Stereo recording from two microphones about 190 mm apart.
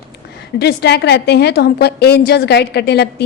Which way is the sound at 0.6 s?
60° left (ahead or behind).